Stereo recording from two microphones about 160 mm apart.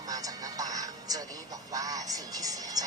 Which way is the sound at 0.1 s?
20° right (ahead or behind).